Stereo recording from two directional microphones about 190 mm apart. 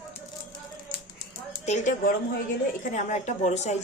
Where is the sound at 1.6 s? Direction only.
40° left (ahead or behind).